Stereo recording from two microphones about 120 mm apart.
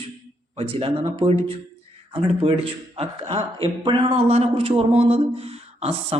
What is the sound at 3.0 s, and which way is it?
Speech, 55° right (ahead or behind).